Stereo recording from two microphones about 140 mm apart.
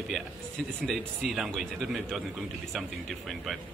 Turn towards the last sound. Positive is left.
turn(degrees=0)  # may be behind; listen again after turning